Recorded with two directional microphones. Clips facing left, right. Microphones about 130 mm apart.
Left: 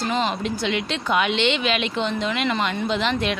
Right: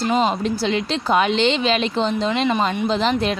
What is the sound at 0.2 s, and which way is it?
Speech, 35° right (ahead or behind).